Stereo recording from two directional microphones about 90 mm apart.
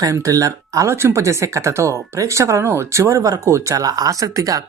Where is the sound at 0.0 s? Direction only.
40° right (ahead or behind).